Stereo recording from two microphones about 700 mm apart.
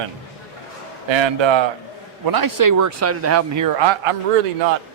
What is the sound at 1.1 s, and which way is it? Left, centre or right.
Speech, right.